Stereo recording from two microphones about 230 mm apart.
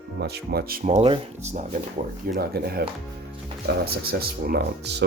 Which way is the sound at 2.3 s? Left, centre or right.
Right.